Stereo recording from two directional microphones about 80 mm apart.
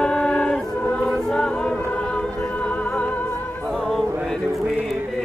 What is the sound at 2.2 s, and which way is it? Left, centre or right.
Music, centre.